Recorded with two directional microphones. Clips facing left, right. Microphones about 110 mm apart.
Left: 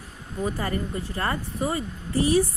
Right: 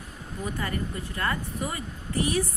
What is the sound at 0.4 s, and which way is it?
Speech, 35° left (ahead or behind).